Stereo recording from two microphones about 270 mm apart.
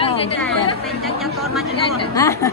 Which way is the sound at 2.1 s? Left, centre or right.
Centre.